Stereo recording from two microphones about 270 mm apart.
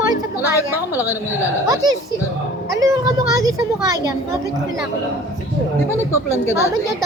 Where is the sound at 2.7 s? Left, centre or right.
Centre.